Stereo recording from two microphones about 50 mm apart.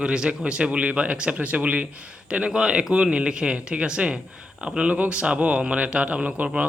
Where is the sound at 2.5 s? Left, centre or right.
Centre.